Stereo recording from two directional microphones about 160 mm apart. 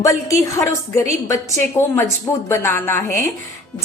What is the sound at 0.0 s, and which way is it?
A woman's voice, 20° left (ahead or behind).